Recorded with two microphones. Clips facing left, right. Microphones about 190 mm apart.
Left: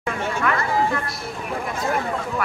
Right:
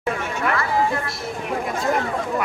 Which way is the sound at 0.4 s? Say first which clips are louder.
Even; 25° right (ahead or behind).